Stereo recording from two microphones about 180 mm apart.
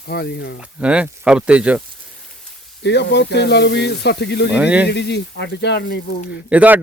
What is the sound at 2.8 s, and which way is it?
Speech, 70° left (ahead or behind).